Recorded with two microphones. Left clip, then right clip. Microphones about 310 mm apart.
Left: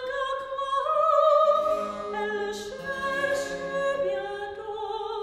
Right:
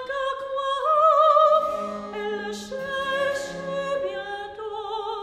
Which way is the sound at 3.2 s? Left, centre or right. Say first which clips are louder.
Right 1 dB; right.